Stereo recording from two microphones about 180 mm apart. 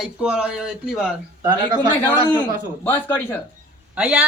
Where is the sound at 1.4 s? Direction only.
20° right (ahead or behind).